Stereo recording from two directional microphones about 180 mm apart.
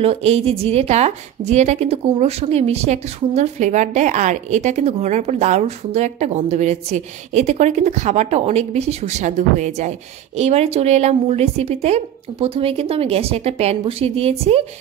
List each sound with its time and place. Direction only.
0.0 s a woman's voice: 35° right (ahead or behind)